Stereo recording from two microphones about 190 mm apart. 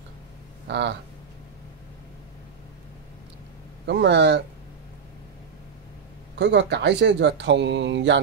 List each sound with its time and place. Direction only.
0.7 s speech: 65° right (ahead or behind)
3.8 s speech: 65° right (ahead or behind)
6.3 s speech: 65° right (ahead or behind)